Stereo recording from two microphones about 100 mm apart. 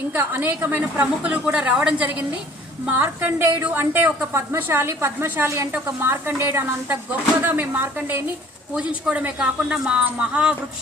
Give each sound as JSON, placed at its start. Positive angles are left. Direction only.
{"t": 0.1, "sound": "a woman's voice", "side_deg": -20}